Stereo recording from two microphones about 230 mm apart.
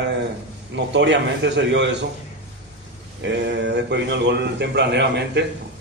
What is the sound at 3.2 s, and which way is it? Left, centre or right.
A man's voice, right.